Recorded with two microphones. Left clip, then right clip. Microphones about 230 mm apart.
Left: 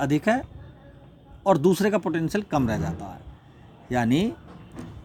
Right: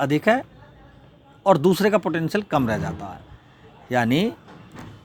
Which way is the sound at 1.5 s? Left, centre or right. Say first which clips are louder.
Right 3 dB; centre.